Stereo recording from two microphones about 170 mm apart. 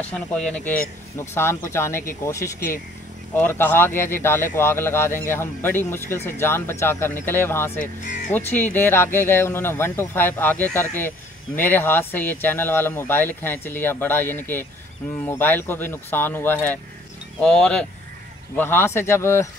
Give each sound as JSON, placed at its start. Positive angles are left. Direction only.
{"t": 0.0, "sound": "speech", "side_deg": 5}